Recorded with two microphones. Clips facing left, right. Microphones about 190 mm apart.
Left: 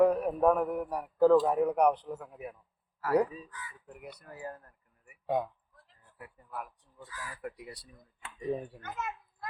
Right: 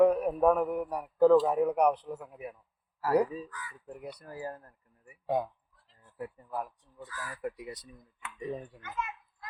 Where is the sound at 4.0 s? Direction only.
30° right (ahead or behind).